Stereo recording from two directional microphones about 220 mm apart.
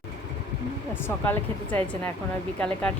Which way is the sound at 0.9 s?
10° left (ahead or behind).